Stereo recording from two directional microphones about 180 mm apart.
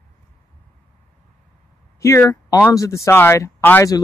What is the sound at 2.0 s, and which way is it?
Speech, 15° left (ahead or behind).